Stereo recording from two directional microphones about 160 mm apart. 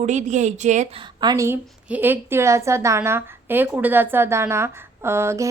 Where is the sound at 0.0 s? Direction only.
50° right (ahead or behind).